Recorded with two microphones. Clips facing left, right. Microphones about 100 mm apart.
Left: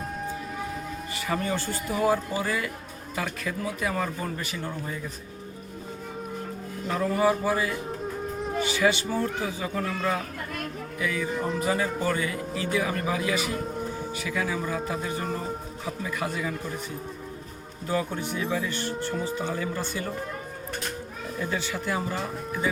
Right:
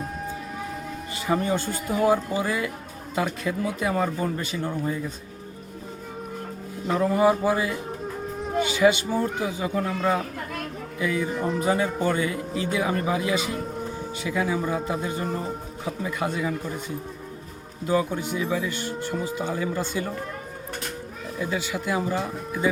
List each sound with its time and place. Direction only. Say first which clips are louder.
1.3 s a man's voice: right 4 dB; 20° right (ahead or behind)
7.0 s a man's voice: right 3 dB; 20° right (ahead or behind)
11.3 s speech: right 2 dB; centre (ahead or behind)
11.6 s a man's voice: right 4 dB; 25° right (ahead or behind)
17.8 s speech: right 4 dB; 15° right (ahead or behind)
21.3 s speech: right 2 dB; 10° right (ahead or behind)